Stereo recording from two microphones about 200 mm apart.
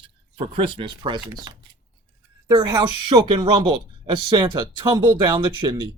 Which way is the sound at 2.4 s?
20° right (ahead or behind).